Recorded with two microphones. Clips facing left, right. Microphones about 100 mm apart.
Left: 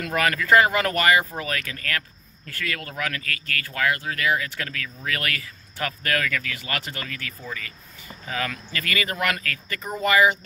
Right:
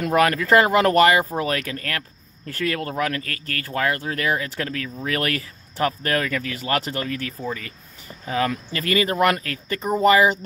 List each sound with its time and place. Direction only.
0.0 s speech: 45° right (ahead or behind)